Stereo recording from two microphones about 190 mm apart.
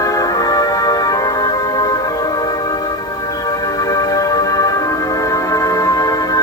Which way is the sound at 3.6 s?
20° left (ahead or behind).